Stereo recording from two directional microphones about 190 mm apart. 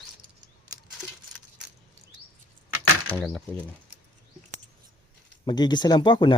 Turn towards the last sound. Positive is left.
turn(degrees=25)  # may be behind; listen again after turning